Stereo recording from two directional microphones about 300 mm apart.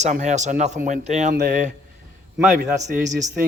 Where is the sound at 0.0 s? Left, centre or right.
Right.